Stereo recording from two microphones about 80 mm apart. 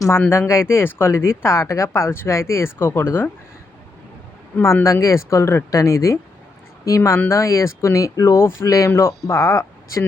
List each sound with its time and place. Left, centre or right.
0.1 s speech: left
4.6 s speech: left